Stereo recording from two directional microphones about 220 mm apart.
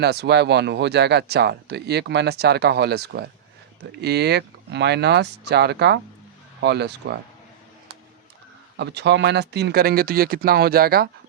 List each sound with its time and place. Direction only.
0.0 s speech: 50° right (ahead or behind)
8.8 s speech: 50° right (ahead or behind)